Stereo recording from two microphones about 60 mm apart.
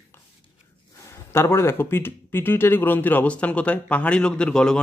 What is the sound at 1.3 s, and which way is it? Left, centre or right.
Speech, left.